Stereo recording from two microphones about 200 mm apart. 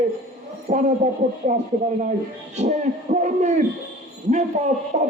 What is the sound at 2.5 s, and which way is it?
A man's voice, 35° right (ahead or behind).